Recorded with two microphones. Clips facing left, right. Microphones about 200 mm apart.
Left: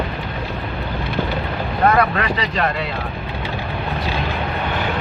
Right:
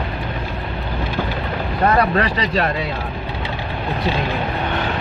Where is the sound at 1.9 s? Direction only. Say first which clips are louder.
Right 1 dB; 35° right (ahead or behind).